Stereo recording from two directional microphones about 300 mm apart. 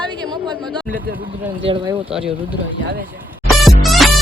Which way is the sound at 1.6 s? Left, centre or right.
Centre.